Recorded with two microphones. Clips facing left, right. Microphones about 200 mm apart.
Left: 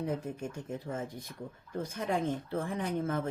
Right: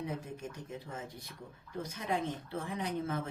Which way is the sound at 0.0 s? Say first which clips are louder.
Left 5 dB; 50° left (ahead or behind).